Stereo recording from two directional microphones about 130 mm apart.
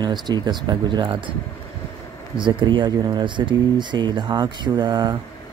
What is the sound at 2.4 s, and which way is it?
Speech, 40° right (ahead or behind).